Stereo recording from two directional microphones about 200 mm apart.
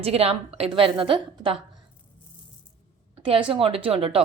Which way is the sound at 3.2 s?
25° right (ahead or behind).